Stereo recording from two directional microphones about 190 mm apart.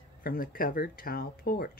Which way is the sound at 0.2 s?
50° left (ahead or behind).